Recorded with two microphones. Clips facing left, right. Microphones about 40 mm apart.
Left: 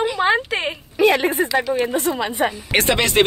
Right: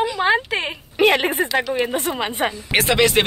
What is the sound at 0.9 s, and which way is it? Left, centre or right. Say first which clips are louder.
A woman's voice: even; right.